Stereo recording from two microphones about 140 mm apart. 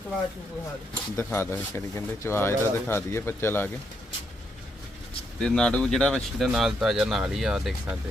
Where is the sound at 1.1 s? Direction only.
15° left (ahead or behind).